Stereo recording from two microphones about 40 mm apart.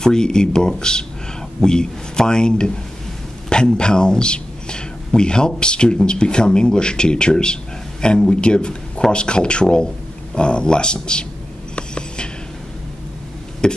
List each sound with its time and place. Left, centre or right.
0.0 s speech: centre
11.7 s writing: left
13.6 s speech: centre